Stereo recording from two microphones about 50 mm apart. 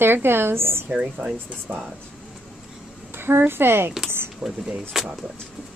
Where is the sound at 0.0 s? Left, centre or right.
Right.